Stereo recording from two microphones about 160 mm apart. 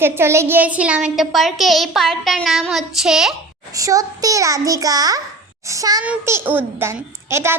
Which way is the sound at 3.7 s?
20° right (ahead or behind).